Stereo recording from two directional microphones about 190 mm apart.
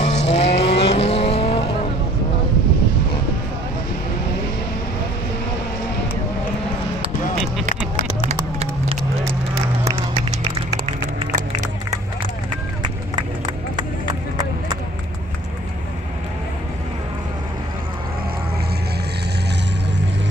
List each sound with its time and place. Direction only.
0.0 s vehicle: 35° left (ahead or behind)
8.3 s run: 35° right (ahead or behind)